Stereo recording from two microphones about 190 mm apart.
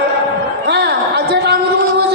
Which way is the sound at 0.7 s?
60° right (ahead or behind).